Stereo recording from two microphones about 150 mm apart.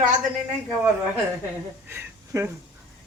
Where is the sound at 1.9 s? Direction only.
15° right (ahead or behind).